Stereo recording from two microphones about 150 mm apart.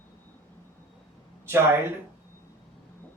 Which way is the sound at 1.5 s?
15° right (ahead or behind).